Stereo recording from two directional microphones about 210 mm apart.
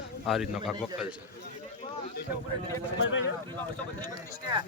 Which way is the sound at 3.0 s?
65° left (ahead or behind).